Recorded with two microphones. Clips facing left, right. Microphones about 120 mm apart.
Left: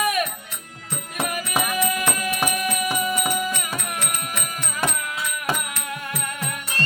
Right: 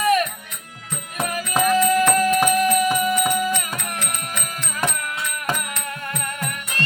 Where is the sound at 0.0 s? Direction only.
10° left (ahead or behind).